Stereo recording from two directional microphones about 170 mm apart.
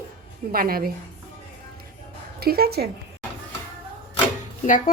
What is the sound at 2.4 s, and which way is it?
Speech, 65° right (ahead or behind).